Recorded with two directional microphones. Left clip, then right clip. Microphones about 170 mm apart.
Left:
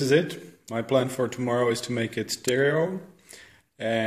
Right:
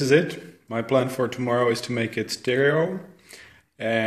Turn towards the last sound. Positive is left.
turn(degrees=10)  # may be behind; listen again after turning